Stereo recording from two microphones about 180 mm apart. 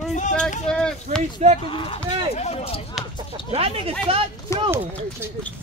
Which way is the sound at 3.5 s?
30° right (ahead or behind).